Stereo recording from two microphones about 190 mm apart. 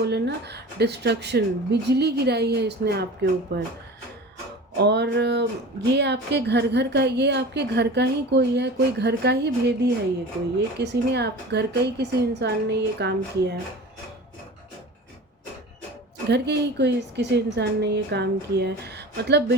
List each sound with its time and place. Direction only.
0.0 s a woman's voice: 60° right (ahead or behind)
4.8 s a woman's voice: 60° right (ahead or behind)
16.3 s a woman's voice: 60° right (ahead or behind)